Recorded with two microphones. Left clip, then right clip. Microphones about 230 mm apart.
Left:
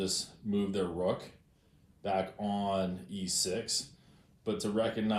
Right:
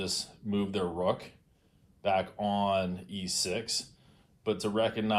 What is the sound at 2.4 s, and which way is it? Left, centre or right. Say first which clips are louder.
Speech: right 4 dB; centre.